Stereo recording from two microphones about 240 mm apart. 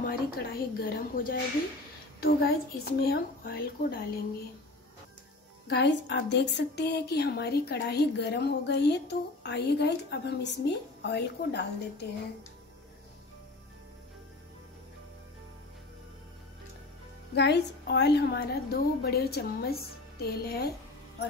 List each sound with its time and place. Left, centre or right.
0.0 s a woman's voice: left
5.7 s a woman's voice: left
17.3 s a woman's voice: left